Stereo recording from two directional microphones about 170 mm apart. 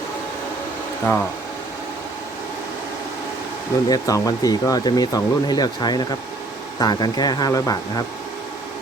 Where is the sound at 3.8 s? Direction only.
20° left (ahead or behind).